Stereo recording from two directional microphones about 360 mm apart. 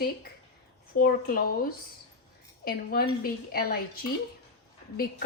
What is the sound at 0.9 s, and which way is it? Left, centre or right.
Speech, left.